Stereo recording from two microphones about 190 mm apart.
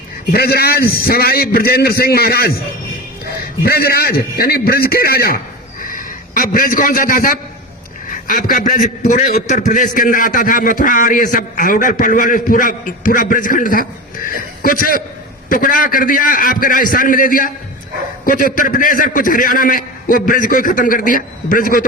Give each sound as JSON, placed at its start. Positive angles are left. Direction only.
{"t": 0.3, "sound": "a man's voice", "side_deg": 55}
{"t": 3.6, "sound": "a man's voice", "side_deg": 55}